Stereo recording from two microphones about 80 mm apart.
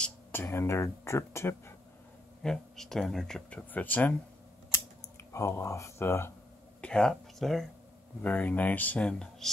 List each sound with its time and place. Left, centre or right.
0.3 s speech: left
2.4 s speech: centre
3.4 s speech: centre
5.3 s speech: left
6.8 s speech: centre
8.2 s speech: centre